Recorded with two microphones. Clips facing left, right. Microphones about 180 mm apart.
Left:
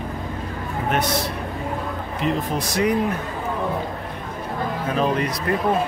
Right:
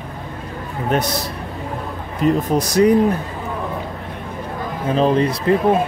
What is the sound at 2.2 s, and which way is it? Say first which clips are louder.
Speech: right 7 dB; 40° right (ahead or behind).